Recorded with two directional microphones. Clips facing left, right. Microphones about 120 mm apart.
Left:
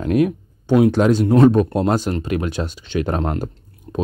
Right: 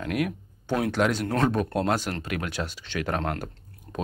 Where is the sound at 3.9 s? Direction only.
10° left (ahead or behind).